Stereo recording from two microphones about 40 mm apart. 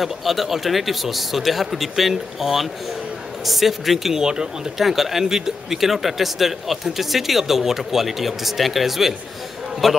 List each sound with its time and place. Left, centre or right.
0.0 s speech: centre
4.1 s speech: centre
4.7 s speech: centre